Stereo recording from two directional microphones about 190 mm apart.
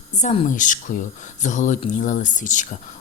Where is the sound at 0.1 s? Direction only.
40° left (ahead or behind).